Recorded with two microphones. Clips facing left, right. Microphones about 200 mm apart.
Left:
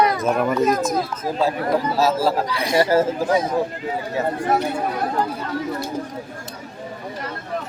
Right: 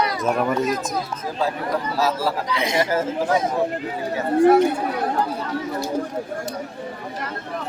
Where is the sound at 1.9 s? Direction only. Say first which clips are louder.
Left 2 dB; 25° left (ahead or behind).